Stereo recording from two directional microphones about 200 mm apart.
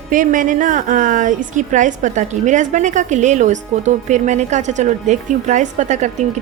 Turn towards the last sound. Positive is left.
turn(degrees=-35)  # may be behind; listen again after turning